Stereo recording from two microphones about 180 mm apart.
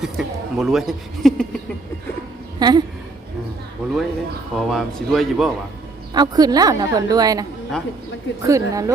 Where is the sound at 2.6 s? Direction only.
25° right (ahead or behind).